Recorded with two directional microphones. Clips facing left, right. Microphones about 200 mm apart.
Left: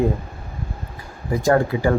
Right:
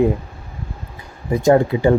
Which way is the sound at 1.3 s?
20° right (ahead or behind).